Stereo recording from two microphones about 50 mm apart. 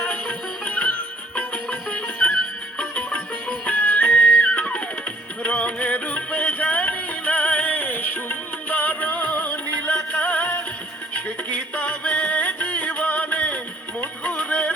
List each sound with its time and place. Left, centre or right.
0.0 s music: left